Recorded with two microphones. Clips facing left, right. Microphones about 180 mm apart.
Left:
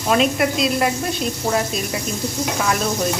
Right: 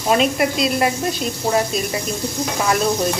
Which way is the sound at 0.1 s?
Centre (ahead or behind).